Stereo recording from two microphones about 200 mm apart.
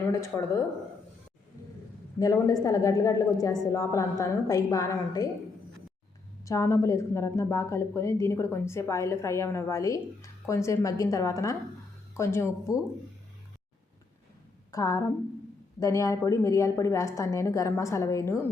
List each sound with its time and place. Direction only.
0.0 s a woman's voice: 15° left (ahead or behind)
2.1 s a woman's voice: 15° left (ahead or behind)
6.4 s a woman's voice: 15° left (ahead or behind)
14.7 s a woman's voice: 15° left (ahead or behind)